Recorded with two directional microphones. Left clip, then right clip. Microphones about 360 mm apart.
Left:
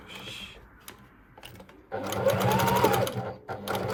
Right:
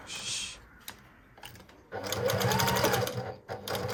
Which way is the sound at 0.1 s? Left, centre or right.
Centre.